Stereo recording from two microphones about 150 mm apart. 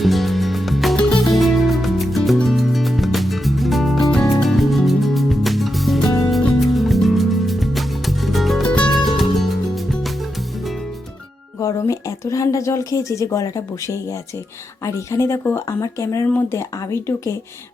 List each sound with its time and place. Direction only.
0.0 s music: centre (ahead or behind)
11.6 s a sound: 20° left (ahead or behind)
14.8 s speech: 20° left (ahead or behind)